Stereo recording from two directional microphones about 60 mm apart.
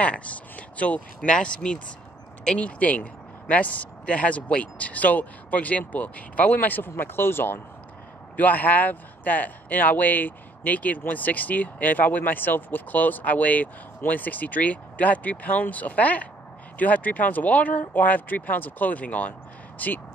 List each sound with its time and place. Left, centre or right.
0.0 s speech: left
8.4 s speech: left